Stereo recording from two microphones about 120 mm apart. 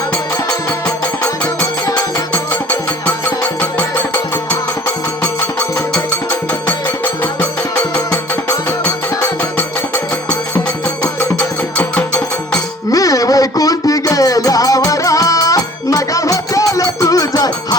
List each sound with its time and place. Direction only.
1.9 s music: 30° left (ahead or behind)
3.2 s music: 15° left (ahead or behind)
5.2 s music: 10° left (ahead or behind)
9.4 s music: 15° left (ahead or behind)
11.3 s music: 10° left (ahead or behind)
12.9 s music: 30° left (ahead or behind)